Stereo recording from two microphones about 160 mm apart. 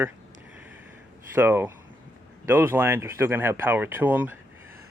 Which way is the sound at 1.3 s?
10° right (ahead or behind).